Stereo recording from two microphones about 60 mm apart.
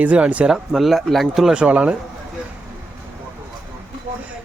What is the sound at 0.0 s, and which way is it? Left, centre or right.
Speech, right.